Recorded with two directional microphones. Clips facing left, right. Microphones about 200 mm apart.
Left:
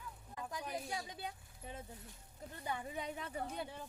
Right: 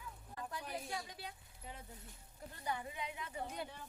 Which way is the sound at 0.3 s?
15° left (ahead or behind).